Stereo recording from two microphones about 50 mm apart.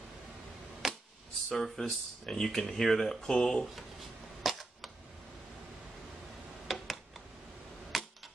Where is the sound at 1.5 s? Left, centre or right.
Centre.